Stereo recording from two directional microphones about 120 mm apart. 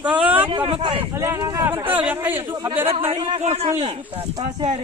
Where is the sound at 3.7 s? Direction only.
55° right (ahead or behind).